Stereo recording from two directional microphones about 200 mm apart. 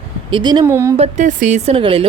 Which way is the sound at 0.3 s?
25° right (ahead or behind).